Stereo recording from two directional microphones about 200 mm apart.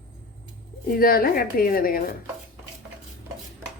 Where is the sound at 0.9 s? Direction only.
45° left (ahead or behind).